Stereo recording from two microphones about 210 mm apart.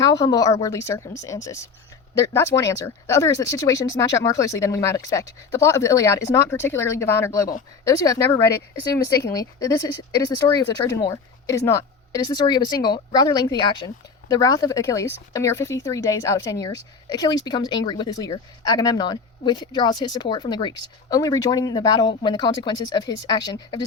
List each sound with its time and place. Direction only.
0.0 s speech: 20° left (ahead or behind)